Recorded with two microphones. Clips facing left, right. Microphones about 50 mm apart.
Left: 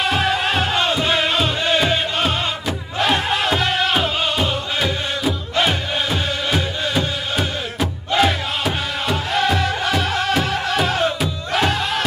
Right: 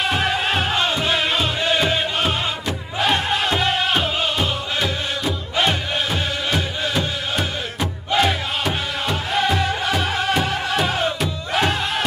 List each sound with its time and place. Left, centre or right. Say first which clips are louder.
0.0 s music: left 2 dB; centre